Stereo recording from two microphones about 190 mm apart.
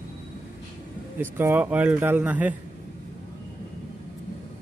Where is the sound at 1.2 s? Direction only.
10° right (ahead or behind).